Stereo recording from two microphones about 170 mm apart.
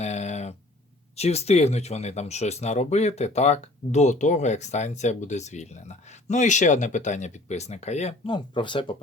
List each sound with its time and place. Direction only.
0.0 s a sound: 40° left (ahead or behind)
1.1 s speech: 40° left (ahead or behind)
8.3 s speech: 30° left (ahead or behind)